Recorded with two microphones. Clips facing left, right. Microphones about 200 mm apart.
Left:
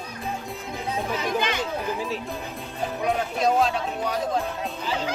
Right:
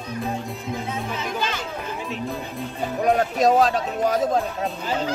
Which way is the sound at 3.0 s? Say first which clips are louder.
Right 5 dB; 40° right (ahead or behind).